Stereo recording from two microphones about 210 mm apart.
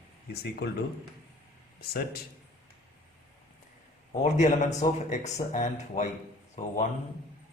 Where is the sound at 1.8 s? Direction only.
50° left (ahead or behind).